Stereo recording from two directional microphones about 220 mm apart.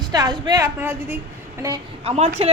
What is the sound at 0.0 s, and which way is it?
A woman's voice, 15° right (ahead or behind).